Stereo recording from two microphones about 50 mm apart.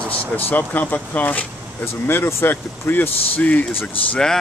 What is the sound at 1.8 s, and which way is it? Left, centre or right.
Speech, left.